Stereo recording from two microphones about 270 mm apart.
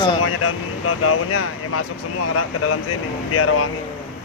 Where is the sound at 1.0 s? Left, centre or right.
Left.